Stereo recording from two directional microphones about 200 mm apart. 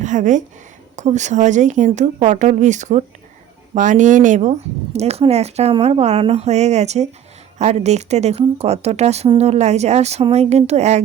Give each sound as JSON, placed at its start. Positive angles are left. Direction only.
{"t": 0.0, "sound": "a woman's voice", "side_deg": -40}